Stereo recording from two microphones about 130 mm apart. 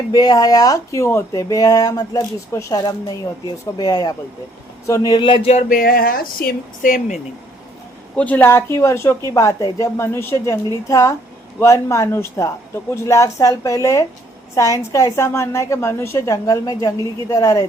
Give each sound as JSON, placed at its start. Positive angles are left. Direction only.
{"t": 0.1, "sound": "speech", "side_deg": 30}
{"t": 5.3, "sound": "music", "side_deg": 60}
{"t": 6.8, "sound": "speech", "side_deg": 90}
{"t": 8.1, "sound": "speech", "side_deg": 10}